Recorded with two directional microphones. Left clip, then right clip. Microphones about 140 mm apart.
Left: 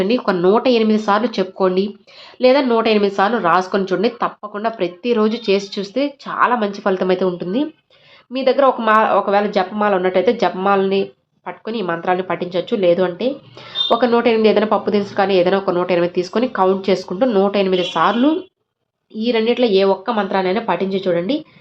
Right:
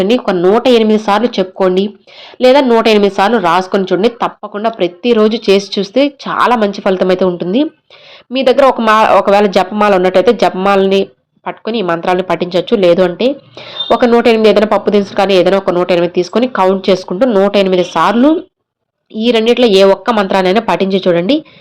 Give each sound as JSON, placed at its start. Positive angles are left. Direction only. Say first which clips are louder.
{"t": 0.0, "sound": "speech", "louder": "right 5 dB", "side_deg": -25}
{"t": 0.3, "sound": "speech", "louder": "right 4 dB", "side_deg": -10}
{"t": 0.6, "sound": "speech", "louder": "right 6 dB", "side_deg": -25}
{"t": 17.2, "sound": "speech", "louder": "right 6 dB", "side_deg": -15}
{"t": 17.5, "sound": "speech", "louder": "right 6 dB", "side_deg": -30}